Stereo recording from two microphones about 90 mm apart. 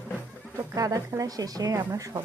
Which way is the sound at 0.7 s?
40° right (ahead or behind).